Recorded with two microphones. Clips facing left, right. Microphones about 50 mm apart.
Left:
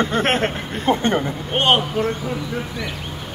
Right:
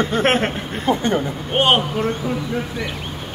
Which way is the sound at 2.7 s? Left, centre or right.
Right.